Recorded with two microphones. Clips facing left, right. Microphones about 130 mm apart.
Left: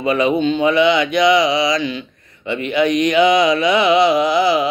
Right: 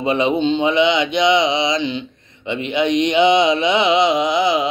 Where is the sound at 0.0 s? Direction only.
25° right (ahead or behind).